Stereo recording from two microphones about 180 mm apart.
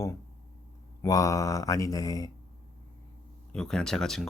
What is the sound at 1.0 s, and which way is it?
Speech, 20° left (ahead or behind).